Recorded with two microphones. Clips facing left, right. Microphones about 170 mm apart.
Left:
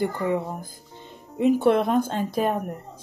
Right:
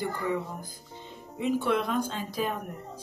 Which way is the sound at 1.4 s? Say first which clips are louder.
Left 8 dB; 50° left (ahead or behind).